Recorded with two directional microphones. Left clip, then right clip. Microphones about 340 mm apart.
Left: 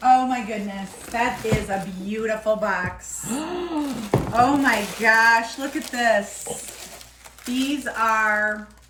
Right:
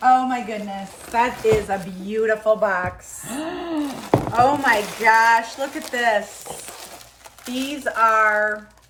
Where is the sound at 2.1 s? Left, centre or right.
Centre.